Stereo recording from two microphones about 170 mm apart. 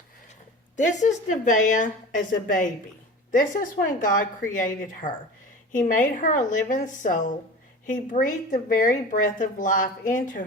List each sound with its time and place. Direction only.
0.8 s a woman's voice: 45° left (ahead or behind)